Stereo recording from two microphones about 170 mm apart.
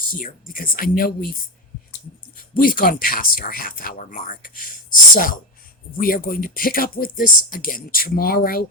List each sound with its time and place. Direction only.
0.2 s speech: 55° left (ahead or behind)
2.6 s speech: 55° left (ahead or behind)